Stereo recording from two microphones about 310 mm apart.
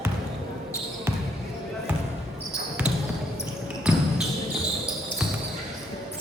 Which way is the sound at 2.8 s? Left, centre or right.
Centre.